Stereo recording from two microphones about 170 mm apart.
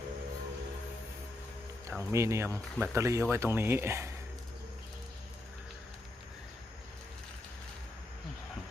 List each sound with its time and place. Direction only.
1.9 s speech: 10° right (ahead or behind)